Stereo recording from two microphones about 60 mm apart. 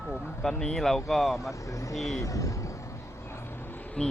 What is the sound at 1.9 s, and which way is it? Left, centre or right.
Speech, centre.